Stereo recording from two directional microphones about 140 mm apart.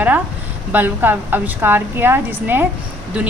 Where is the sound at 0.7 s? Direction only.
15° right (ahead or behind).